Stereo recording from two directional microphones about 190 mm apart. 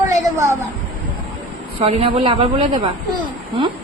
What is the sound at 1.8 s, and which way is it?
Speech, 30° right (ahead or behind).